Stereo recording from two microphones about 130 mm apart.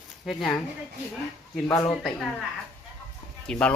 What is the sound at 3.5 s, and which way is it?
Speech, 5° left (ahead or behind).